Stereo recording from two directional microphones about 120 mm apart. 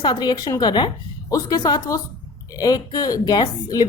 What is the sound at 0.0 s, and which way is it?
Speech, 35° left (ahead or behind).